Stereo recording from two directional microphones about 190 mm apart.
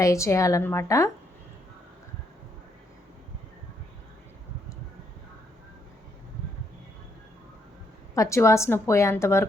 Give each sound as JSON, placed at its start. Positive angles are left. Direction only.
{"t": 0.0, "sound": "a woman's voice", "side_deg": 15}
{"t": 8.1, "sound": "a woman's voice", "side_deg": 15}